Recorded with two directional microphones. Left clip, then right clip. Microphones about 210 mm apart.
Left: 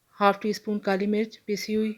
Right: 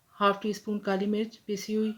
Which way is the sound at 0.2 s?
35° left (ahead or behind).